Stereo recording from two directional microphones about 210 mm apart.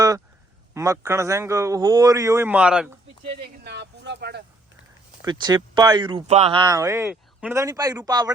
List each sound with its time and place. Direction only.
0.7 s a man's voice: 15° right (ahead or behind)
3.6 s speech: 55° right (ahead or behind)
5.2 s speech: 20° right (ahead or behind)